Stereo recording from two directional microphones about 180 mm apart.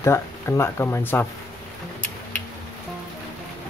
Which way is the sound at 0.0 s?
15° left (ahead or behind).